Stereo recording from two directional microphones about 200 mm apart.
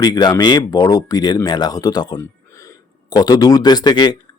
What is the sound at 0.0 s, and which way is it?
Speech, 20° left (ahead or behind).